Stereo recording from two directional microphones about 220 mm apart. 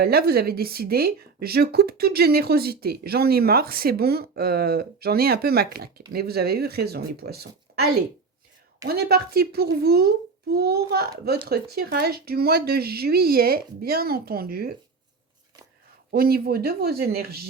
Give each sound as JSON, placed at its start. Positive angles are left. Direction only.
{"t": 0.0, "sound": "speech", "side_deg": -45}
{"t": 8.9, "sound": "speech", "side_deg": -45}
{"t": 16.1, "sound": "speech", "side_deg": -45}